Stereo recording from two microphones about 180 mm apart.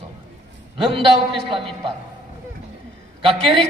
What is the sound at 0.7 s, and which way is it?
A man's voice, 30° right (ahead or behind).